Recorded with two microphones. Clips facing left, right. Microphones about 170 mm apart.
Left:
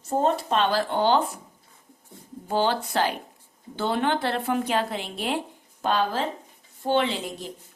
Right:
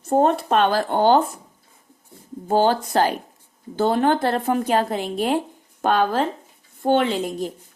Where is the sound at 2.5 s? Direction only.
45° right (ahead or behind).